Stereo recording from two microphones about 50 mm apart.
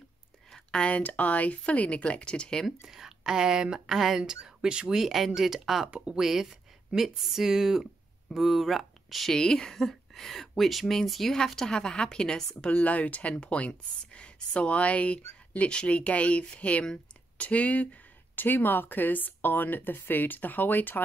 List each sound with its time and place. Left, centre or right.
0.5 s speech: centre
2.6 s a woman's voice: centre
4.2 s speech: centre
4.9 s speech: centre
5.9 s speech: centre
6.2 s a woman's voice: centre
9.3 s speech: centre
12.7 s speech: left
18.3 s speech: left